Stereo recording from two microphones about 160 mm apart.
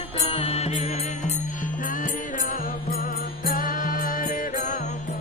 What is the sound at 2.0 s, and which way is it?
Music, 60° left (ahead or behind).